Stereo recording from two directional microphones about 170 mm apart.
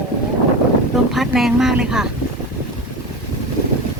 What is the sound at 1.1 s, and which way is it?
Speech, centre (ahead or behind).